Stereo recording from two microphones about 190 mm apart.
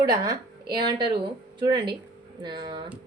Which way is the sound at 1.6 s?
25° right (ahead or behind).